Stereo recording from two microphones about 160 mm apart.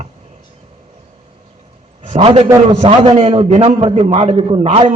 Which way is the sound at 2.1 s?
35° right (ahead or behind).